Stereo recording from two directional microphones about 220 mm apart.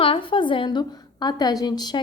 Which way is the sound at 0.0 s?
25° left (ahead or behind).